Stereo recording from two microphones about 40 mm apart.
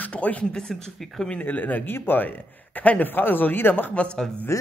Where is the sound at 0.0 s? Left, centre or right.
Left.